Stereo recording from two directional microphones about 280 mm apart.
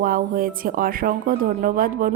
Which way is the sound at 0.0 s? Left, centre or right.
Right.